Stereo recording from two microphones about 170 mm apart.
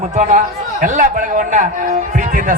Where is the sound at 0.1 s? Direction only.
45° right (ahead or behind).